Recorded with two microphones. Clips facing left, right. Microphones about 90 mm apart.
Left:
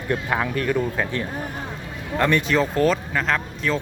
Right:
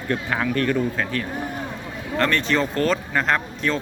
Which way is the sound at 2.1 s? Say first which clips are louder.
Left 1 dB; 10° left (ahead or behind).